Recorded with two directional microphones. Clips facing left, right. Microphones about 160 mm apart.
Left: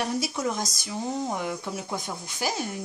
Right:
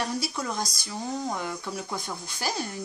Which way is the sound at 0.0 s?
15° left (ahead or behind).